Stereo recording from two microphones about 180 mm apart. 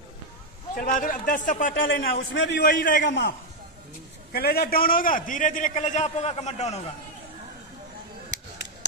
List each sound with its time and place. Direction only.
0.7 s a man's voice: 45° left (ahead or behind)
1.9 s a man's voice: 70° left (ahead or behind)
2.7 s a man's voice: 50° left (ahead or behind)
3.0 s a man's voice: 70° left (ahead or behind)
4.3 s a man's voice: 60° left (ahead or behind); by 6.8 s 40° left (ahead or behind)